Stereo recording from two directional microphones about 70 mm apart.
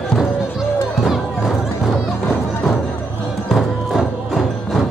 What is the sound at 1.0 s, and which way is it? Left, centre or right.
Music, centre.